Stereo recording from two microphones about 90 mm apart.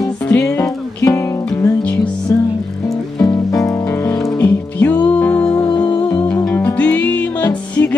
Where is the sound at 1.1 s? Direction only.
30° left (ahead or behind).